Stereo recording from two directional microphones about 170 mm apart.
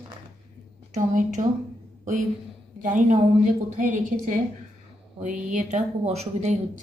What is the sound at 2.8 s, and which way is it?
Speech, 50° right (ahead or behind).